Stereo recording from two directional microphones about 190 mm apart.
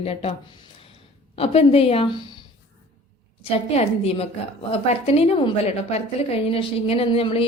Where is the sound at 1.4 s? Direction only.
30° left (ahead or behind).